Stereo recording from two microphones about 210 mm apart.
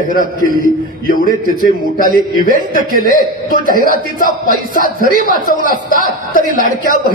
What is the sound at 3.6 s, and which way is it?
Speech, 40° right (ahead or behind).